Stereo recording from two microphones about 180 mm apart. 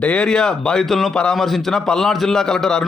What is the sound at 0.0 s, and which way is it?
A man's voice, 5° left (ahead or behind).